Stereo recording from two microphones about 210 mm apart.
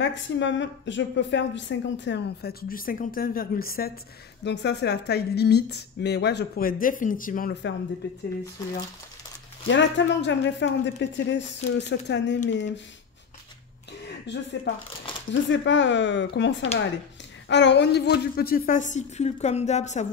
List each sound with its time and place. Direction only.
0.0 s a woman's voice: 60° left (ahead or behind)
4.5 s a woman's voice: 55° left (ahead or behind)
8.6 s speech: 20° left (ahead or behind)
9.7 s a woman's voice: 60° left (ahead or behind)
14.0 s a woman's voice: 55° left (ahead or behind); by 20.1 s 35° left (ahead or behind)